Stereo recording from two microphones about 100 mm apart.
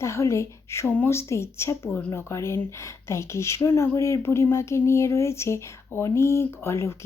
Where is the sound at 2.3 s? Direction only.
30° left (ahead or behind).